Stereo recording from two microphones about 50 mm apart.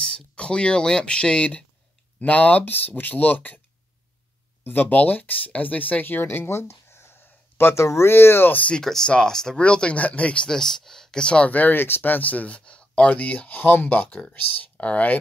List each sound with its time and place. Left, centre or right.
0.0 s speech: centre
4.6 s speech: left
8.7 s speech: centre
9.6 s speech: left
10.5 s speech: centre; by 13.6 s left
13.6 s speech: left